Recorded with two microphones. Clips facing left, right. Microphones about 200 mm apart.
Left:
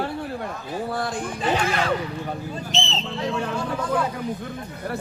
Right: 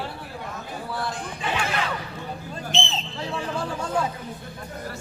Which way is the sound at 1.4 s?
40° left (ahead or behind).